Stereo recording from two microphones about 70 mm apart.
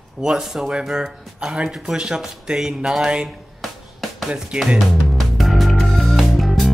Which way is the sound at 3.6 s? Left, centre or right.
Centre.